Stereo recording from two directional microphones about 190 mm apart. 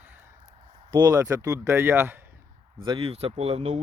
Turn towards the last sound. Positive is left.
turn(degrees=-35)  # may be behind; listen again after turning